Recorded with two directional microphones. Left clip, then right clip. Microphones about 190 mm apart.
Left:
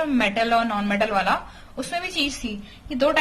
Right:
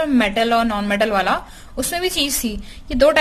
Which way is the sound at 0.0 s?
30° right (ahead or behind).